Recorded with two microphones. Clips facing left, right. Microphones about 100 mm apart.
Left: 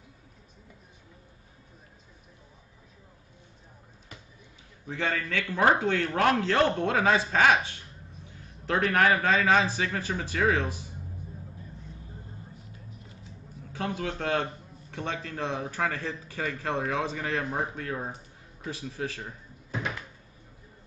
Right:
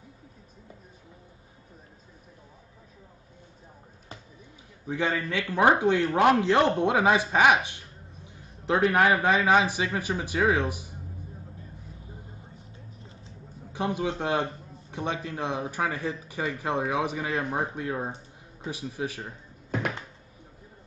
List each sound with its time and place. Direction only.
4.8 s a man's voice: 15° right (ahead or behind)
13.7 s a man's voice: 20° right (ahead or behind)